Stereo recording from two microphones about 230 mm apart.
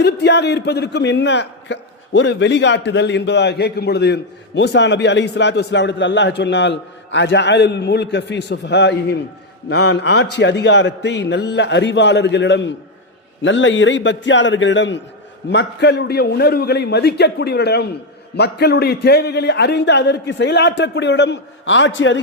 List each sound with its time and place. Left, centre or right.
0.0 s a man's voice: left